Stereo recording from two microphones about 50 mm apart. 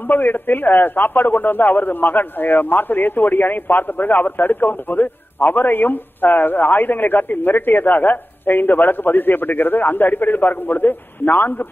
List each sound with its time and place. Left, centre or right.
0.0 s a man's voice: left